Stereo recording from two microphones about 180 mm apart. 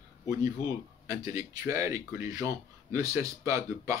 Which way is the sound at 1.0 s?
20° right (ahead or behind).